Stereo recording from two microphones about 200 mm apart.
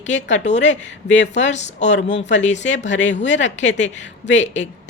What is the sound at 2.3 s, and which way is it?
A woman's voice, 35° left (ahead or behind).